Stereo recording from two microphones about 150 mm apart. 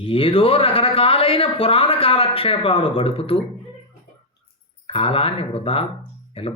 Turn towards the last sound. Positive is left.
turn(degrees=40)  # may be behind; listen again after turning